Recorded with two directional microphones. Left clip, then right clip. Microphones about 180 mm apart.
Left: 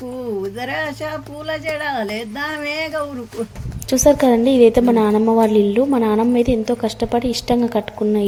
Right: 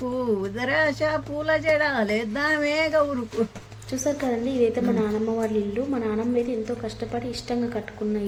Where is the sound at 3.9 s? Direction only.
45° left (ahead or behind).